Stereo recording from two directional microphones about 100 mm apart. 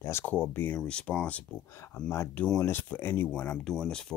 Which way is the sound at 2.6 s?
20° left (ahead or behind).